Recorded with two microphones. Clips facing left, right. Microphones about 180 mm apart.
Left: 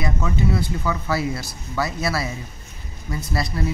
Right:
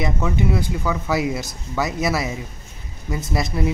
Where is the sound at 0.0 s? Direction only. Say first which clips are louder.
Right 2 dB; 15° right (ahead or behind).